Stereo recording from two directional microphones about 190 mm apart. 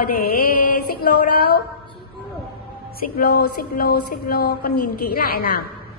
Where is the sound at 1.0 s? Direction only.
55° left (ahead or behind).